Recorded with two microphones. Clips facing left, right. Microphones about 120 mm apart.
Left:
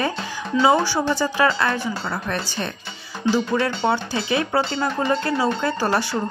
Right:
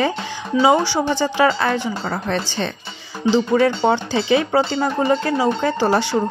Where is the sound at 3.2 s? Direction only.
20° right (ahead or behind).